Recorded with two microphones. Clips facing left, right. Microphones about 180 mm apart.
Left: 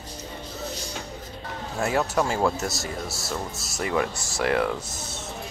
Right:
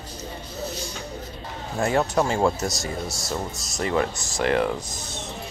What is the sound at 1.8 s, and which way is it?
Speech, 5° left (ahead or behind).